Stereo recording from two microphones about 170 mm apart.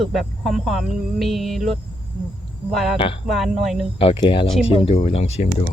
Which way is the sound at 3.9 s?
30° left (ahead or behind).